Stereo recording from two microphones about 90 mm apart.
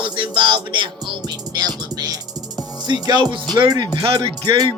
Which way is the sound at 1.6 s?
50° right (ahead or behind).